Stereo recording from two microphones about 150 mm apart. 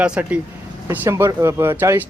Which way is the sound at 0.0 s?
5° right (ahead or behind).